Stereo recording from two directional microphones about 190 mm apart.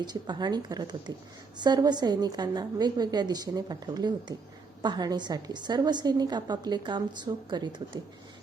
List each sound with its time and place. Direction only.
0.0 s a woman's voice: 20° right (ahead or behind)